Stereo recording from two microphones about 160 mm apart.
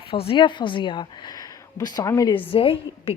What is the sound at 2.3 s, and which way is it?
Speech, 35° left (ahead or behind).